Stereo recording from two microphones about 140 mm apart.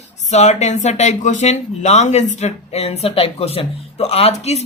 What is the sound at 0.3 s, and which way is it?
Speech, 55° left (ahead or behind).